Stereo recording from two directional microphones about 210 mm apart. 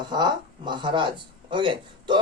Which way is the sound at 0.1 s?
20° right (ahead or behind).